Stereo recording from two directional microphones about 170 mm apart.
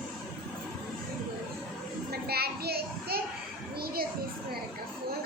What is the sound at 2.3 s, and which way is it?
Children playing, 70° right (ahead or behind).